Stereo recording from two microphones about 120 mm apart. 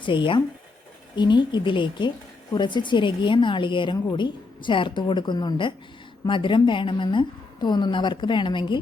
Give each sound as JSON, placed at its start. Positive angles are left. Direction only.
{"t": 0.0, "sound": "a woman's voice", "side_deg": 45}